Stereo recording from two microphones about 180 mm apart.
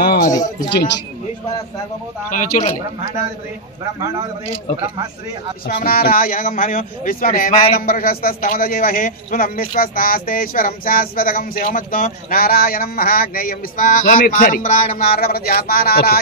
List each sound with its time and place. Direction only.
0.3 s speech: 20° left (ahead or behind)
2.3 s a man's voice: 45° left (ahead or behind)
5.8 s a man's voice: 55° left (ahead or behind)